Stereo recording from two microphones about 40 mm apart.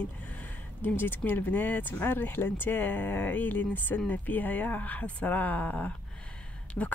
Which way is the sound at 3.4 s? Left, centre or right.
Left.